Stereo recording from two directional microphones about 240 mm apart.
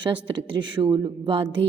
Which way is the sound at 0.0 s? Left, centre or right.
Centre.